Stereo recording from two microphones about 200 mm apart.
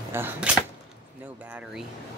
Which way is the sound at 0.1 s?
10° right (ahead or behind).